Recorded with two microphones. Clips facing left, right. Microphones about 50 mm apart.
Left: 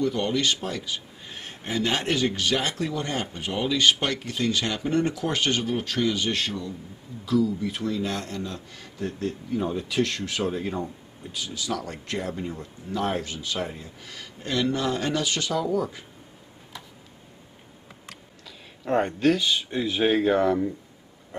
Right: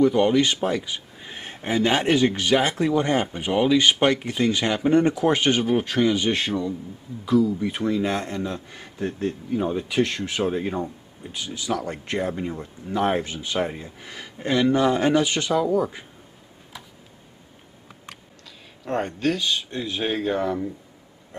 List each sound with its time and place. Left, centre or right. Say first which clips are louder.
0.0 s speech: right 7 dB; centre
9.5 s speech: right 2 dB; centre
18.9 s speech: left 2 dB; centre